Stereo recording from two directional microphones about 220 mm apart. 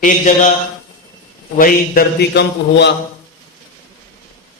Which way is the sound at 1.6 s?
40° left (ahead or behind).